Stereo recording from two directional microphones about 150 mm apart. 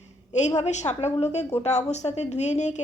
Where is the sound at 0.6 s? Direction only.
50° left (ahead or behind).